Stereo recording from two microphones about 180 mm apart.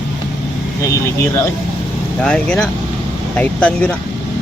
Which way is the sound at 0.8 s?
15° left (ahead or behind).